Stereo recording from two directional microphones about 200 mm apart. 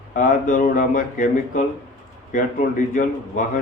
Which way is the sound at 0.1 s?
40° left (ahead or behind).